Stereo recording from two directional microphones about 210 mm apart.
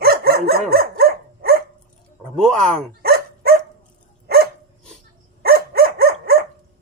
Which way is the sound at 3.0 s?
45° right (ahead or behind).